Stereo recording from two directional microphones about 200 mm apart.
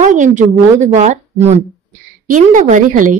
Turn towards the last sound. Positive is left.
turn(degrees=-40)  # may be behind; listen again after turning